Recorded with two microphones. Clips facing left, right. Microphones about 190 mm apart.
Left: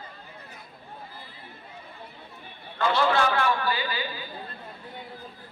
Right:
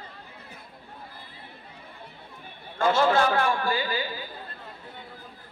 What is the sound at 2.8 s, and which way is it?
A man's voice, 45° right (ahead or behind).